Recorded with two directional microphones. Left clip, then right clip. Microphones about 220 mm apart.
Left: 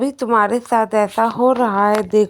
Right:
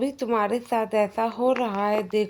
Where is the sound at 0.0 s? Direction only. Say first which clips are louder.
Left 8 dB; 15° left (ahead or behind).